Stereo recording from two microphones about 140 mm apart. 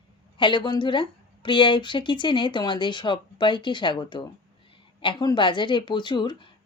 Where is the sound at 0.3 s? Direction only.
35° left (ahead or behind).